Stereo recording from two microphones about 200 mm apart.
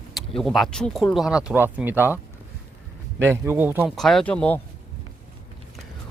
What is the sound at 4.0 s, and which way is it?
Speech, centre (ahead or behind).